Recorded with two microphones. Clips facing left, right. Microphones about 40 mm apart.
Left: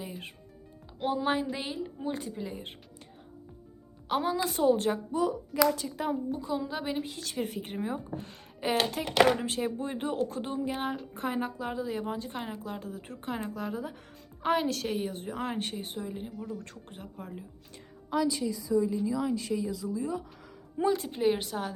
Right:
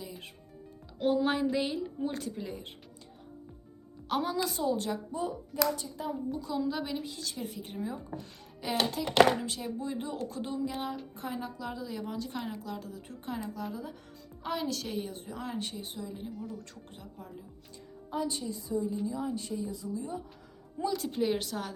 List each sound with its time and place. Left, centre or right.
1.0 s speech: centre
4.1 s speech: centre
4.4 s speech: left
5.7 s a woman's voice: left
6.3 s a woman's voice: left
7.0 s a woman's voice: left
18.1 s a woman's voice: left
20.9 s a woman's voice: left